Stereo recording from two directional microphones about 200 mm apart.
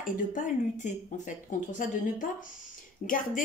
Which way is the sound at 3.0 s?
40° left (ahead or behind).